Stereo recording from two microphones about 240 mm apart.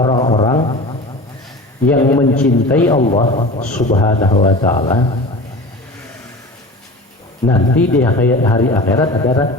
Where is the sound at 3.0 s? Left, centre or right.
Left.